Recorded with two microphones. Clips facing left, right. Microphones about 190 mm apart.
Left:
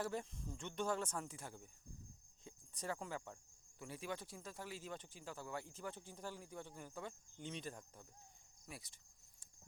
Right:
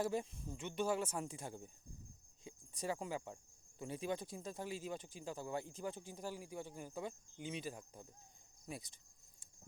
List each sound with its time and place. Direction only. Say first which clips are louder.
0.0 s cricket: right 4 dB; 15° right (ahead or behind)
8.6 s cricket: right 6 dB; 20° right (ahead or behind)